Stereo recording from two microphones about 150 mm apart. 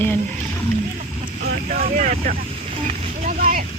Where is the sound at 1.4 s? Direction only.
80° right.